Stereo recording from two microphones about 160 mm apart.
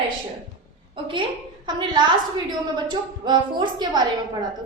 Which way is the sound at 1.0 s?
35° right (ahead or behind).